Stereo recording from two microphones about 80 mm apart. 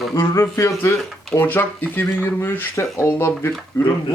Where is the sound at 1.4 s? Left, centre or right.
Left.